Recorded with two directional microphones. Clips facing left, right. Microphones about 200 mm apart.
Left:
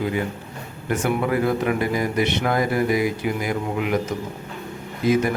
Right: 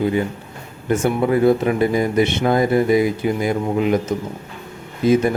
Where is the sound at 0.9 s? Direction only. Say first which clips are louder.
Right 4 dB; 25° right (ahead or behind).